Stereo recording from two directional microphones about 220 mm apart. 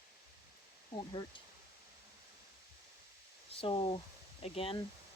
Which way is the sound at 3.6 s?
25° left (ahead or behind).